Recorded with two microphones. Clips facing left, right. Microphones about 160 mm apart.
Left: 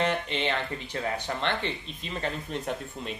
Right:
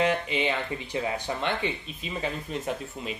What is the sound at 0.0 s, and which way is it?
Speech, 10° right (ahead or behind).